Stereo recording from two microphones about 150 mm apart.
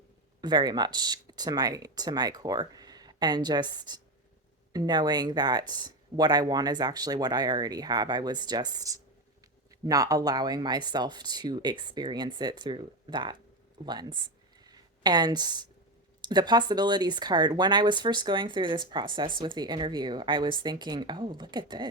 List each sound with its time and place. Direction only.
0.4 s speech: 25° right (ahead or behind)
14.6 s a sound: 25° right (ahead or behind)
16.2 s speech: 30° right (ahead or behind)